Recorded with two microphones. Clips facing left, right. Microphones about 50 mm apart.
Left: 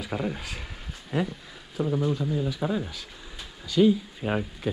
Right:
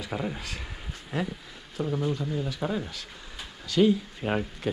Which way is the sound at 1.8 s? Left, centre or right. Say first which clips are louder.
Left 2 dB; centre.